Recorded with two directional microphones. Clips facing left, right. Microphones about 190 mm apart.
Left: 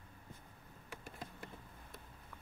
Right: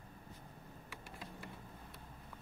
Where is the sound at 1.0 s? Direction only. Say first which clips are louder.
Even; 45° left (ahead or behind).